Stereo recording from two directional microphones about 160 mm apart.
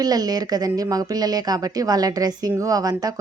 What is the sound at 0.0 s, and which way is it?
A woman's voice, 25° right (ahead or behind).